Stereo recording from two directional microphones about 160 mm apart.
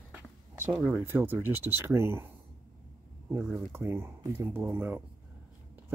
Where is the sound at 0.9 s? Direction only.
15° right (ahead or behind).